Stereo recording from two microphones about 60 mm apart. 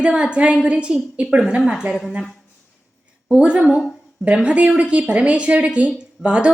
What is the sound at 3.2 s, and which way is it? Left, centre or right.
A woman's voice, centre.